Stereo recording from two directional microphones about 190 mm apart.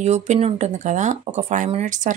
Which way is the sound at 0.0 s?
35° right (ahead or behind).